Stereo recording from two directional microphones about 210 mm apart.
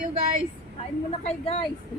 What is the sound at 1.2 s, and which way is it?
Speech, 25° left (ahead or behind).